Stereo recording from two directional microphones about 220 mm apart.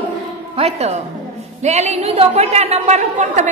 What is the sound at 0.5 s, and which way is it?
A woman's voice, 30° right (ahead or behind).